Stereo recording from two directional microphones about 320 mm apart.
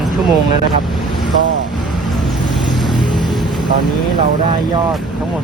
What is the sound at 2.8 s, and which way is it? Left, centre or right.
Vehicle, centre.